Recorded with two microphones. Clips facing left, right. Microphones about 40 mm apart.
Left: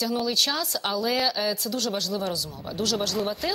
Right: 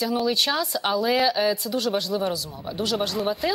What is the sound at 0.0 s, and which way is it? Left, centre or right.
Speech, centre.